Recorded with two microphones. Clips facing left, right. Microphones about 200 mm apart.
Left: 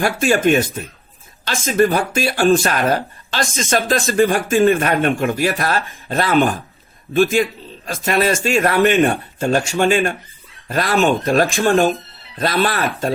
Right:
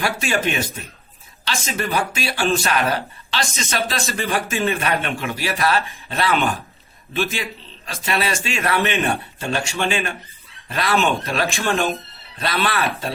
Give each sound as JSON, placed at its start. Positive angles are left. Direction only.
{"t": 0.0, "sound": "speech", "side_deg": 50}